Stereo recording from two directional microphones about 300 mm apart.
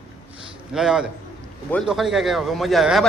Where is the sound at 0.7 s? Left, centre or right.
Centre.